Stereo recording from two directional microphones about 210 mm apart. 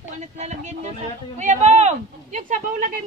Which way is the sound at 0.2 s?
35° right (ahead or behind).